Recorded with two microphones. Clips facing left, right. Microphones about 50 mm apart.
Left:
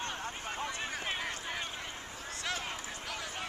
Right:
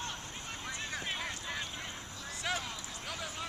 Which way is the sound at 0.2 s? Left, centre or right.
Left.